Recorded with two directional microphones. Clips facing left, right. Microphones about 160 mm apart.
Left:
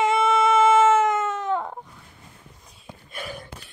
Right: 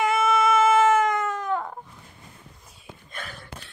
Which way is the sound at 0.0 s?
30° left (ahead or behind).